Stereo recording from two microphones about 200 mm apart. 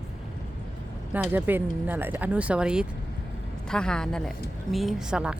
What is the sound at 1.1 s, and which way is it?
A woman's voice, 10° right (ahead or behind).